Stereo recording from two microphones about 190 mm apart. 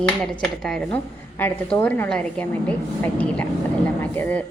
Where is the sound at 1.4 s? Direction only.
10° left (ahead or behind).